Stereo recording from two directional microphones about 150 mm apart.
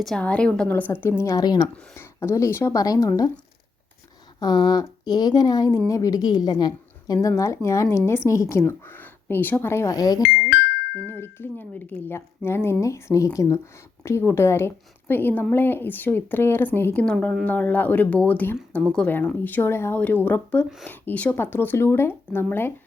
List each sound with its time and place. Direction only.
0.0 s a woman's voice: 5° left (ahead or behind)
1.2 s a woman's voice: 25° left (ahead or behind)
4.4 s a woman's voice: 30° left (ahead or behind)
10.5 s music: 90° left
11.1 s a woman's voice: 15° left (ahead or behind)